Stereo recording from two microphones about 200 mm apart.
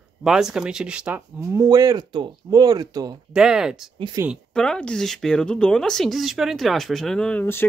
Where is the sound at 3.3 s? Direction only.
5° right (ahead or behind).